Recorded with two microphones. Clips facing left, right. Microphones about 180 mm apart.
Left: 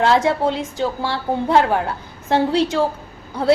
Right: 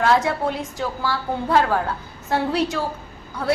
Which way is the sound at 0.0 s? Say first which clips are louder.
Left 3 dB; 25° left (ahead or behind).